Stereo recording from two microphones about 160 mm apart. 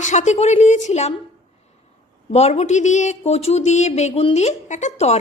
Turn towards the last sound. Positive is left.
turn(degrees=45)  # may be behind; listen again after turning